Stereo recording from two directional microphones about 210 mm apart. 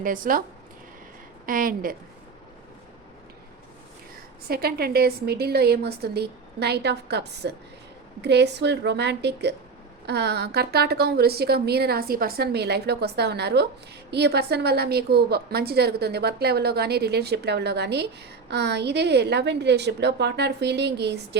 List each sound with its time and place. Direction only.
0.0 s a woman's voice: 40° right (ahead or behind)
1.5 s a woman's voice: 40° right (ahead or behind)
4.4 s a woman's voice: 45° right (ahead or behind)